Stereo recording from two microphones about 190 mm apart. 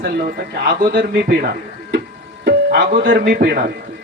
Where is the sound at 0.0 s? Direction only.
50° right (ahead or behind).